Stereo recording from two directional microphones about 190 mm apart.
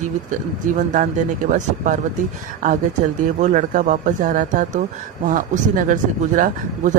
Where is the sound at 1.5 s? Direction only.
40° right (ahead or behind).